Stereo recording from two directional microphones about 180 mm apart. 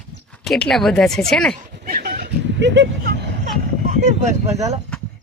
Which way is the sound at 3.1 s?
55° right (ahead or behind).